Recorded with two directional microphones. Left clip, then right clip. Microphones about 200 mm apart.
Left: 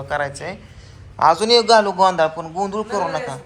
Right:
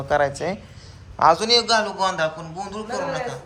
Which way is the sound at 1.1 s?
15° right (ahead or behind).